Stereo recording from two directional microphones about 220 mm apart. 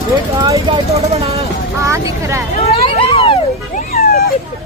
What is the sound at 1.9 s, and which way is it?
Speech, 15° right (ahead or behind).